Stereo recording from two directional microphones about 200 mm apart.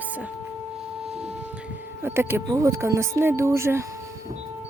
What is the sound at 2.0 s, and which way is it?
Speech, 10° right (ahead or behind).